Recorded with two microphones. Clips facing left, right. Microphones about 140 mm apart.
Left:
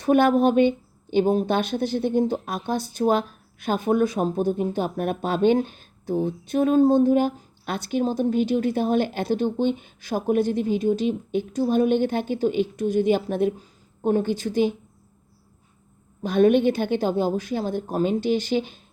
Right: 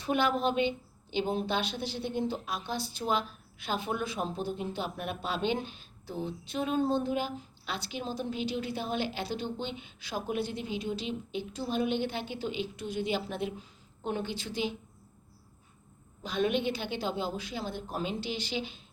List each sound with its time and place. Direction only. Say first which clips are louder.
0.0 s speech: left 10 dB; 50° left (ahead or behind)
16.2 s speech: left 12 dB; 55° left (ahead or behind)